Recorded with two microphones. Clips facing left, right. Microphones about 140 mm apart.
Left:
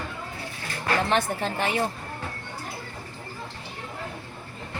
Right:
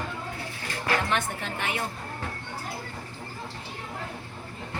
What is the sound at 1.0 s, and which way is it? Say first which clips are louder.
Speech: left 5 dB; 35° left (ahead or behind).